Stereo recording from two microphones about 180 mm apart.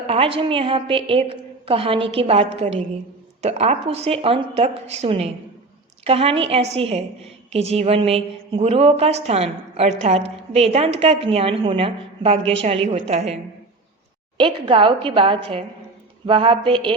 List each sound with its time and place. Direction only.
0.1 s a woman's voice: 30° right (ahead or behind)